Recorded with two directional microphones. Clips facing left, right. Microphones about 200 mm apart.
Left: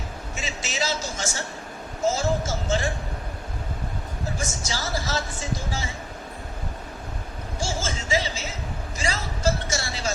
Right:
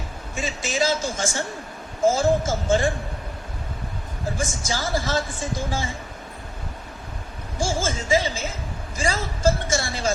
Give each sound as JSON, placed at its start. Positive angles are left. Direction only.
{"t": 0.3, "sound": "speech", "side_deg": -50}
{"t": 4.4, "sound": "speech", "side_deg": -50}
{"t": 7.6, "sound": "speech", "side_deg": -50}